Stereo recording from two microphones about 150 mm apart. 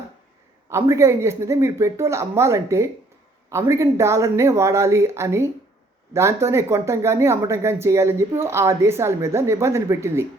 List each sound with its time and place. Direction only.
0.7 s speech: 20° right (ahead or behind)